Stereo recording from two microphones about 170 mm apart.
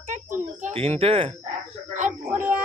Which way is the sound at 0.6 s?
35° right (ahead or behind).